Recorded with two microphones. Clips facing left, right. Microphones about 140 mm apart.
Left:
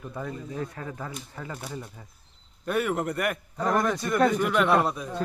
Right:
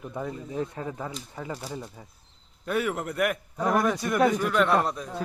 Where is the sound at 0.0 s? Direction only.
15° right (ahead or behind).